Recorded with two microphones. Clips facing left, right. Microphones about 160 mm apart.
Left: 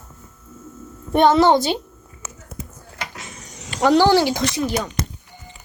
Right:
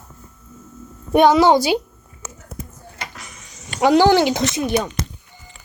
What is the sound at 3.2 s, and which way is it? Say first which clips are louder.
Power windows: left 3 dB; 25° left (ahead or behind).